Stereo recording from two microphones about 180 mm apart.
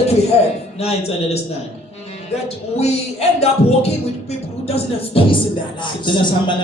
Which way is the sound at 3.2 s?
35° left (ahead or behind).